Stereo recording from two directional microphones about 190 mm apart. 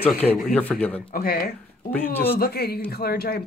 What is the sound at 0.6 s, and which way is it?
Speech, 10° left (ahead or behind).